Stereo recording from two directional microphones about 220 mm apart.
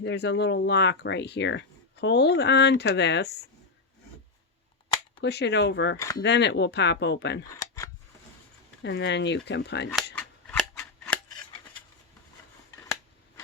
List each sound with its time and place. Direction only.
0.0 s speech: 50° left (ahead or behind)
5.2 s speech: 50° left (ahead or behind)
6.0 s speech: 15° left (ahead or behind)
6.2 s speech: 55° left (ahead or behind)
8.8 s speech: 55° left (ahead or behind)
9.9 s scissors: 5° left (ahead or behind)